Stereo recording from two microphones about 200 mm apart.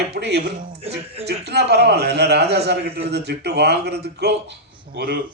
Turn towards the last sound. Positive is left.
turn(degrees=-50)  # may be behind; listen again after turning